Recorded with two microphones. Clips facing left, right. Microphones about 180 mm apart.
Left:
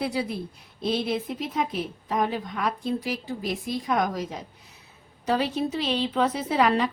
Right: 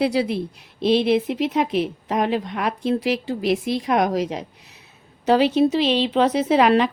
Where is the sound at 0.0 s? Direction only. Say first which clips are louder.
Right 8 dB; 80° right.